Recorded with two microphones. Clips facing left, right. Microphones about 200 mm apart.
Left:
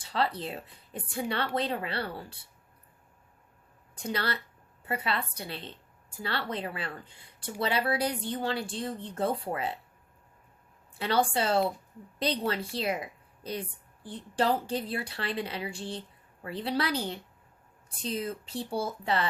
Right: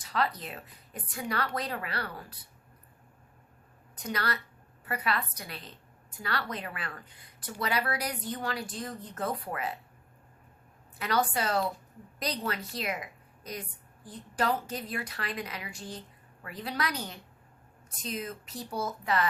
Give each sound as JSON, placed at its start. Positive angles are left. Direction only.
{"t": 0.0, "sound": "a woman's voice", "side_deg": 30}
{"t": 3.9, "sound": "a woman's voice", "side_deg": 30}
{"t": 10.9, "sound": "a woman's voice", "side_deg": 30}